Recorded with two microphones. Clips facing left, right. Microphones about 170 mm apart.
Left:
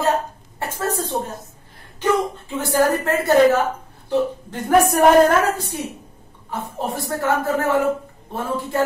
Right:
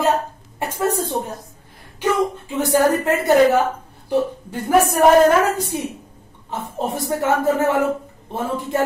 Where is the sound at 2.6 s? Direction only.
20° right (ahead or behind).